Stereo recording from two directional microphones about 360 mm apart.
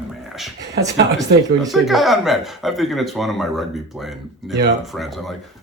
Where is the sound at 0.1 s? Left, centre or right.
Centre.